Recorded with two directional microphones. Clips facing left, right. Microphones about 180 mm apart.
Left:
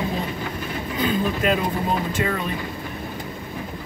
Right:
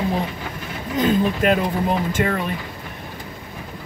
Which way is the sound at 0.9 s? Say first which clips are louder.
Right 5 dB; 50° right (ahead or behind).